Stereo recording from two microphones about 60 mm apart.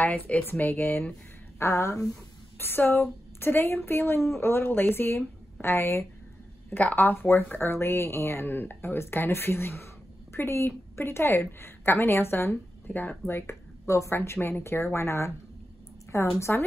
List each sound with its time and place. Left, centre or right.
0.0 s a woman's voice: left
1.6 s speech: left
2.6 s a woman's voice: left
6.8 s a woman's voice: left
13.3 s speech: left
16.3 s speech: left